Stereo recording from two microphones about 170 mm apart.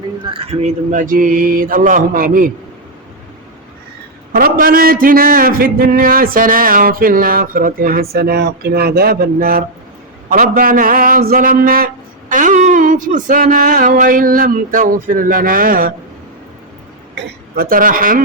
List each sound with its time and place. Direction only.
0.3 s speech: 30° right (ahead or behind)
0.9 s a man's voice: 50° right (ahead or behind)
4.3 s a man's voice: 60° right (ahead or behind)
8.1 s a man's voice: 65° right (ahead or behind)
12.3 s a sound: 50° right (ahead or behind)
17.6 s a man's voice: 55° right (ahead or behind)